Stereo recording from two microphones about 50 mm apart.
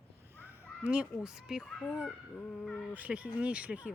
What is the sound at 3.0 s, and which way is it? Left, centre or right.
Speech, right.